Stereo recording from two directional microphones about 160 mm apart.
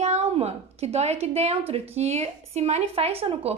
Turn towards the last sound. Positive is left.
turn(degrees=-40)  # may be behind; listen again after turning